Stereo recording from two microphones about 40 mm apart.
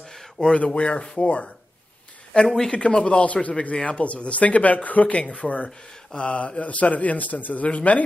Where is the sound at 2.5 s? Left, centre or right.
Centre.